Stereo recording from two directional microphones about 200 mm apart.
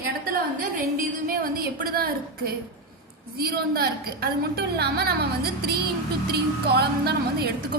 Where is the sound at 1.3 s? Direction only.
45° right (ahead or behind).